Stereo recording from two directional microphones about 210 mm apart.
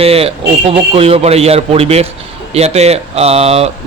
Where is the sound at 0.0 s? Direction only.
30° right (ahead or behind).